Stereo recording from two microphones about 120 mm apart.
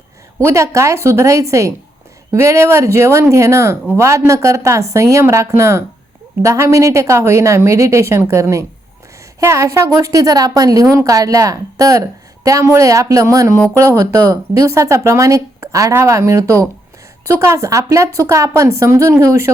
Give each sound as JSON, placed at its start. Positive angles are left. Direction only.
{"t": 0.3, "sound": "a woman's voice", "side_deg": -25}